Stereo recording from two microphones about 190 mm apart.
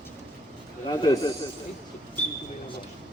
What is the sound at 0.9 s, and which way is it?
Speech, 20° left (ahead or behind).